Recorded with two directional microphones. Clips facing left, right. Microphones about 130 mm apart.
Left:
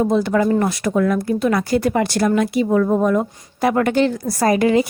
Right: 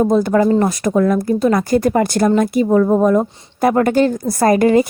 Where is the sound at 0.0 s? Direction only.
45° right (ahead or behind).